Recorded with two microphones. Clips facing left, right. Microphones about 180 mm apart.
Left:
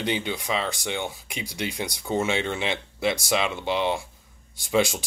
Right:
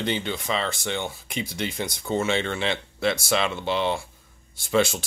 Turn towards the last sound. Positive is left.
turn(degrees=15)  # may be behind; listen again after turning